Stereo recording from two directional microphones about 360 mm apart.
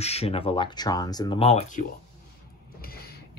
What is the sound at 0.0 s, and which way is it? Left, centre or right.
Speech, centre.